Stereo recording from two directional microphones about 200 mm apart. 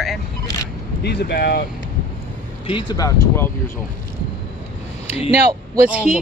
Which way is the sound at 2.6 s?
25° left (ahead or behind).